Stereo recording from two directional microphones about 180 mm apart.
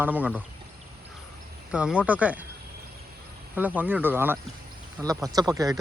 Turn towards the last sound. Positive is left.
turn(degrees=-20)  # may be behind; listen again after turning